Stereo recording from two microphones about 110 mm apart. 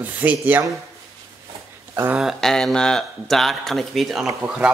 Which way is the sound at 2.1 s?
Centre (ahead or behind).